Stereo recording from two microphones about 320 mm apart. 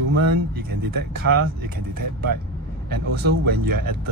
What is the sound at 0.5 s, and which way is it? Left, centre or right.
A man's voice, right.